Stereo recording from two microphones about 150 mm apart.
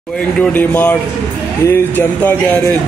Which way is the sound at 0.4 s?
10° left (ahead or behind).